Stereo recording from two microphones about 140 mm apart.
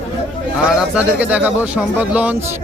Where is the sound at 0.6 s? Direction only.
5° right (ahead or behind).